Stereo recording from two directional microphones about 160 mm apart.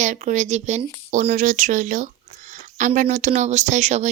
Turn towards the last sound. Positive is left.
turn(degrees=-45)  # may be behind; listen again after turning